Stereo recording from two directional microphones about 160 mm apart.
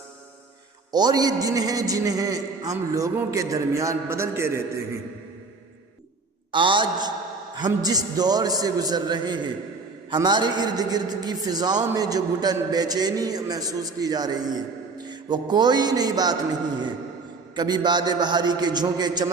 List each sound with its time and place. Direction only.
0.9 s a man's voice: 25° right (ahead or behind)
6.5 s a man's voice: 30° right (ahead or behind)
17.5 s a man's voice: 25° right (ahead or behind)